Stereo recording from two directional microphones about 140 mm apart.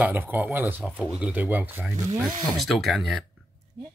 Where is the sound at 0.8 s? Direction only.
Centre (ahead or behind).